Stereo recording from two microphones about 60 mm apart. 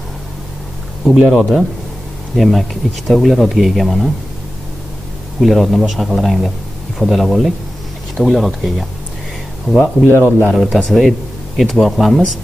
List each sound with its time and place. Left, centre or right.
1.3 s speech: centre
5.4 s speech: centre
9.7 s speech: centre
10.0 s speech: right
10.5 s speech: centre